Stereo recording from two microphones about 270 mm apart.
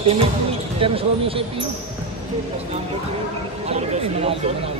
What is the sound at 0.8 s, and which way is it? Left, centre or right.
Speech, centre.